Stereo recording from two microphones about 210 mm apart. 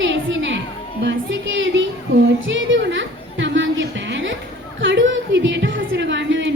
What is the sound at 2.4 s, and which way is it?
Chatter, 65° right (ahead or behind).